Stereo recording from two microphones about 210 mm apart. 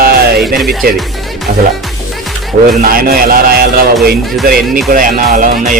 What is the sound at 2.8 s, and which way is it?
Speech, 45° right (ahead or behind).